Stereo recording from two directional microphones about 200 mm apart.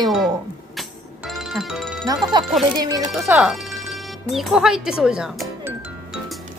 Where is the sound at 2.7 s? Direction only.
20° right (ahead or behind).